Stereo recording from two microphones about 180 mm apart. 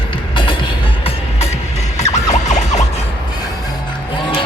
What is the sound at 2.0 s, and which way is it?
Music, 40° left (ahead or behind).